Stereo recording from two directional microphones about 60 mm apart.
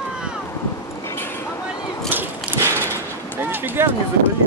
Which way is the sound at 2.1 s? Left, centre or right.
Right.